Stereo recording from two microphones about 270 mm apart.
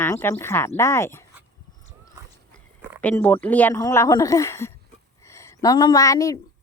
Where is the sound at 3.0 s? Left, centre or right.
Centre.